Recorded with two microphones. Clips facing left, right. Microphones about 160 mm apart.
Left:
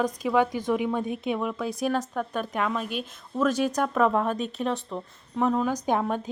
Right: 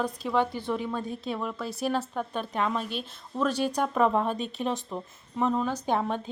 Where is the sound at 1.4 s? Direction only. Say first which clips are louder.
Left 4 dB; 5° left (ahead or behind).